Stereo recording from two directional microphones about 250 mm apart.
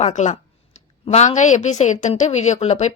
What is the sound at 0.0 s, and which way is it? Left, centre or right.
Speech, left.